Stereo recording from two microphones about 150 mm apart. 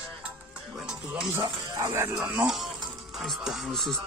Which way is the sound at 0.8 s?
5° right (ahead or behind).